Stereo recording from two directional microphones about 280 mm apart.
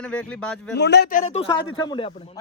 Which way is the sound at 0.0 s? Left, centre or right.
Centre.